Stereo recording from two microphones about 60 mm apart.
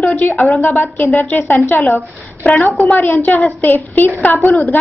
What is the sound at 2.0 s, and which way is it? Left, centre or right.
A woman's voice, left.